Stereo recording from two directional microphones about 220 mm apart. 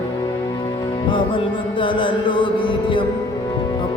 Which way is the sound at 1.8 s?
20° left (ahead or behind).